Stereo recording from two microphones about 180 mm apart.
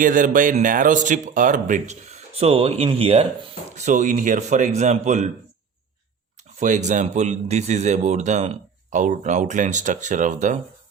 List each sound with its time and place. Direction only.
0.0 s speech: 45° right (ahead or behind)
6.6 s speech: 40° right (ahead or behind)